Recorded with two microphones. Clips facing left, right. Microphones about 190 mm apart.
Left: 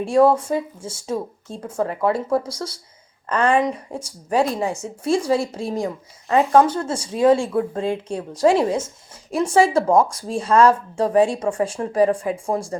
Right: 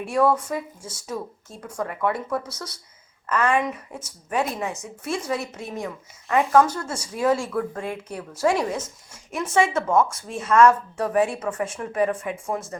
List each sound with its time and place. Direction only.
0.0 s speech: 30° left (ahead or behind)